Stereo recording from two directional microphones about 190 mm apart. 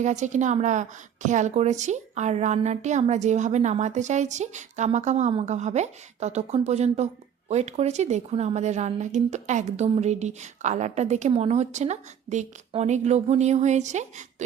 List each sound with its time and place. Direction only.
0.0 s a woman's voice: 40° right (ahead or behind)